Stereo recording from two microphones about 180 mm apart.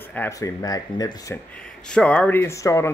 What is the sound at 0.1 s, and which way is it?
Speech, 15° left (ahead or behind).